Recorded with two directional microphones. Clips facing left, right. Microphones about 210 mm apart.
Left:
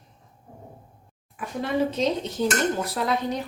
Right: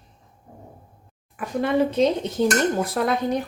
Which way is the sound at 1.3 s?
55° right (ahead or behind).